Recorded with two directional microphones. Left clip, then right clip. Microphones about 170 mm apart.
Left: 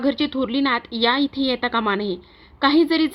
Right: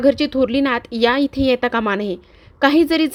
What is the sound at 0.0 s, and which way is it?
A woman's voice, 30° right (ahead or behind).